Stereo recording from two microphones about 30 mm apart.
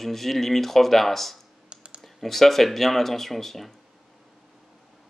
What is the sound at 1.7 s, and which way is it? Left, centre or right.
Computer keyboard, right.